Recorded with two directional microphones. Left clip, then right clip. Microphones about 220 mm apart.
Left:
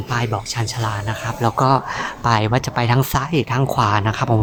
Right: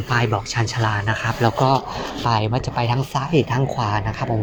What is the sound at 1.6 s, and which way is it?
Speech, 20° left (ahead or behind).